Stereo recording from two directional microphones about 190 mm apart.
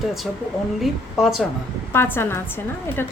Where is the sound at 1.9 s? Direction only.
15° left (ahead or behind).